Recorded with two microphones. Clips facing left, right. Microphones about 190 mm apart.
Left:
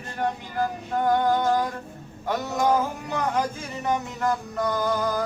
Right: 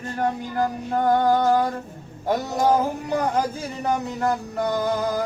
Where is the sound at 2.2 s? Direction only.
35° right (ahead or behind).